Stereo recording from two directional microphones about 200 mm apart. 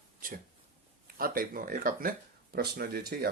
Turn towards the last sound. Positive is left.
turn(degrees=-50)  # may be behind; listen again after turning